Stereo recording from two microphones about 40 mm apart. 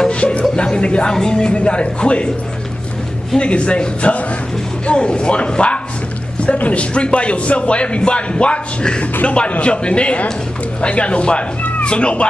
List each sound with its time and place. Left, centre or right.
0.1 s a sound: left
0.7 s a man's voice: left
3.3 s a man's voice: left